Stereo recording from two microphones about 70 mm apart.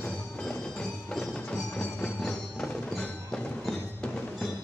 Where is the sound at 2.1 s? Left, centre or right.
Centre.